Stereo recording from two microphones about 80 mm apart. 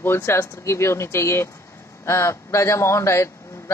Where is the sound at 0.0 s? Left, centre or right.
Left.